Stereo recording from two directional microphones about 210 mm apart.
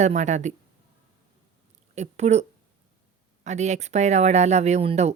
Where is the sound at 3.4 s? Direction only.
35° right (ahead or behind).